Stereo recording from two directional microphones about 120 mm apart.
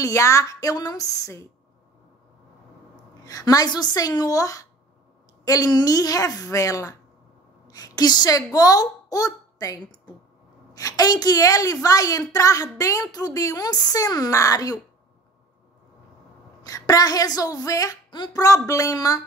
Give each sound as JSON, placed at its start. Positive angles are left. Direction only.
{"t": 0.0, "sound": "a woman's voice", "side_deg": 25}
{"t": 3.3, "sound": "a woman's voice", "side_deg": 30}
{"t": 16.6, "sound": "a woman's voice", "side_deg": 30}